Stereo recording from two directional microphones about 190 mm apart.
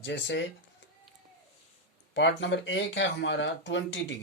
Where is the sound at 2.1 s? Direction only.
70° left (ahead or behind).